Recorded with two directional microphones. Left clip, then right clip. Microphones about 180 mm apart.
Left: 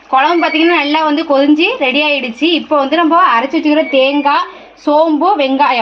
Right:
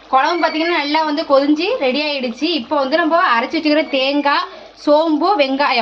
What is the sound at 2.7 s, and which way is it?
A woman's voice, 40° left (ahead or behind).